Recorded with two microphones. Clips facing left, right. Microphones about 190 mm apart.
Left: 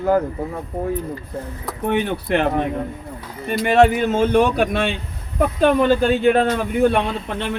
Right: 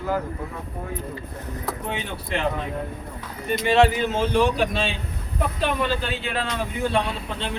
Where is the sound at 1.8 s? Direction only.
55° left (ahead or behind).